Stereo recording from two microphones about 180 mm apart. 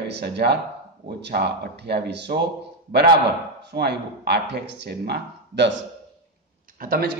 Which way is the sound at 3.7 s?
65° right (ahead or behind).